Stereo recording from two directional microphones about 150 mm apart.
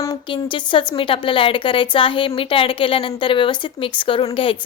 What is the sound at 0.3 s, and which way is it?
A woman's voice, 35° left (ahead or behind).